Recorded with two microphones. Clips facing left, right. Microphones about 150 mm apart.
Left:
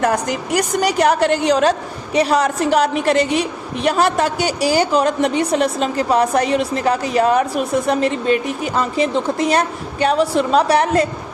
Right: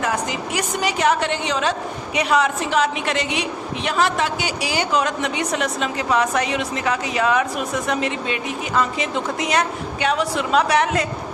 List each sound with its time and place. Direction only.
0.0 s a woman's voice: 45° left (ahead or behind)